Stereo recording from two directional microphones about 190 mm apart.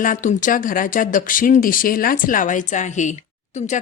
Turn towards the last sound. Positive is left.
turn(degrees=40)  # may be behind; listen again after turning